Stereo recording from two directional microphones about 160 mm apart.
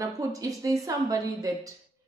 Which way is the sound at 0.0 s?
20° right (ahead or behind).